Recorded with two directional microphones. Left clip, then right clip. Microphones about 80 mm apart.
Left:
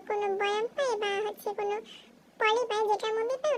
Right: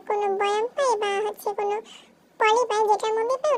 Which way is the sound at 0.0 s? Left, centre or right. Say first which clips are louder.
Right 6 dB; right.